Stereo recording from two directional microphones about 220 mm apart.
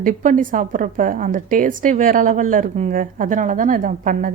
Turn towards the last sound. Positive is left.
turn(degrees=-35)  # may be behind; listen again after turning